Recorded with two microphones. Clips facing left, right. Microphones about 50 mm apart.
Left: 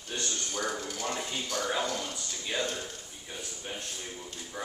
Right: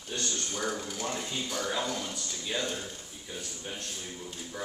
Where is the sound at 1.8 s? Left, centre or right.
Centre.